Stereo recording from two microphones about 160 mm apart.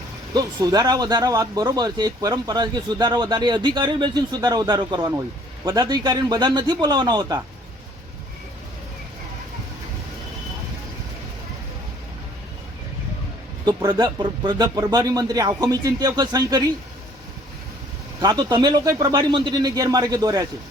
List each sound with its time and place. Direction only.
0.3 s speech: 25° right (ahead or behind)
13.7 s speech: 25° right (ahead or behind)
18.2 s speech: 25° right (ahead or behind)